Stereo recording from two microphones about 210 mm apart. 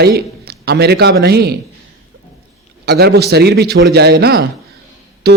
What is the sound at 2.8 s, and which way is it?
A man's voice, 50° right (ahead or behind).